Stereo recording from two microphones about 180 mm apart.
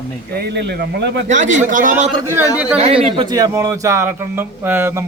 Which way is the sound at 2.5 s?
5° right (ahead or behind).